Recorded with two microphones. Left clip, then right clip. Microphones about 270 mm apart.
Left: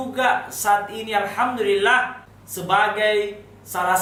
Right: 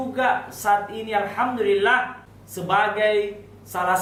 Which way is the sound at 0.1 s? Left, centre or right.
Centre.